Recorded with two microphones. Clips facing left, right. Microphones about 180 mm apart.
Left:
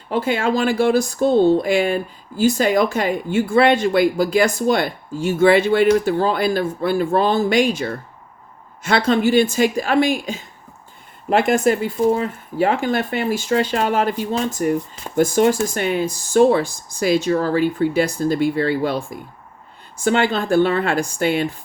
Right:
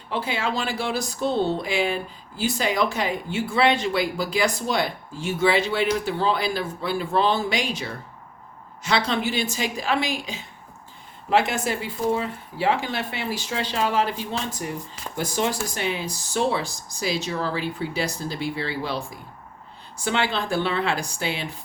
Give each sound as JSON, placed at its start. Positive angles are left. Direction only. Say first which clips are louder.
{"t": 0.1, "sound": "speech", "louder": "left 7 dB", "side_deg": 45}